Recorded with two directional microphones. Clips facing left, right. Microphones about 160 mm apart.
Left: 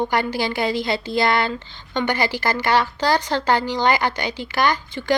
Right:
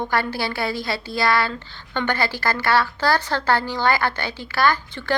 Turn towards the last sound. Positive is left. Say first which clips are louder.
# left 1 dB
turn(degrees=15)  # may be behind; listen again after turning